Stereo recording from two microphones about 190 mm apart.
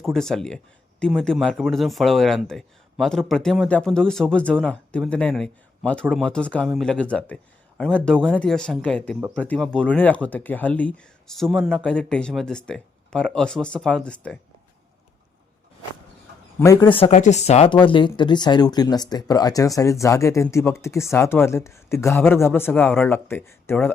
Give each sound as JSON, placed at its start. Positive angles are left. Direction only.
{"t": 0.0, "sound": "speech", "side_deg": 0}
{"t": 16.6, "sound": "speech", "side_deg": 15}
{"t": 16.9, "sound": "speech", "side_deg": 35}